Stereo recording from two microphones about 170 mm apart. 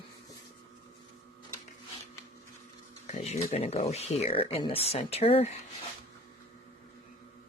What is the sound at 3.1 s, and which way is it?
Speech, 40° left (ahead or behind).